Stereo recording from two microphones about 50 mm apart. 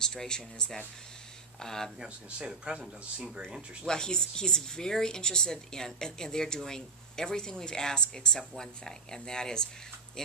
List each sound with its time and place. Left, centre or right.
0.0 s a woman's voice: centre
2.0 s speech: centre
3.8 s a woman's voice: centre